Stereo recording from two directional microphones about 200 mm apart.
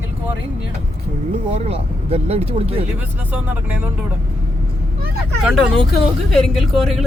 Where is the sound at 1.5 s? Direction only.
30° right (ahead or behind).